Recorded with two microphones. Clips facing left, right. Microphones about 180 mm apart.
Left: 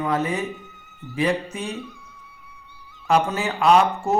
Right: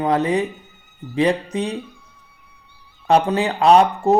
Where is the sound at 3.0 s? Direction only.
35° right (ahead or behind).